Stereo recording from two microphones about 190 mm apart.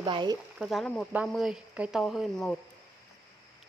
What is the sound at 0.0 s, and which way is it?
Speech, 25° right (ahead or behind).